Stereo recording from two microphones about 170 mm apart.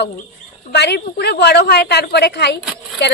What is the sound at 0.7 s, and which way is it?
Speech, 75° left (ahead or behind).